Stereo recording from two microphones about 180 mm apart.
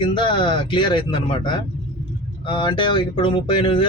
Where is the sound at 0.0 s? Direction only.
25° left (ahead or behind).